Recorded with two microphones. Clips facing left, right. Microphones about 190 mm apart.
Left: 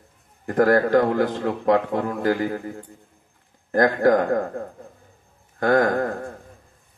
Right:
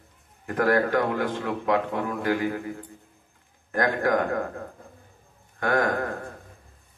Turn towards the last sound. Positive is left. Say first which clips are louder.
# left 5 dB
turn(degrees=40)  # may be behind; listen again after turning